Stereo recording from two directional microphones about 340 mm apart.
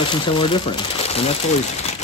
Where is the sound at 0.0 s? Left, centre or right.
Centre.